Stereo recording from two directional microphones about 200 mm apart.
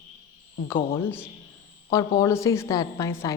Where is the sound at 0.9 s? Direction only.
10° left (ahead or behind).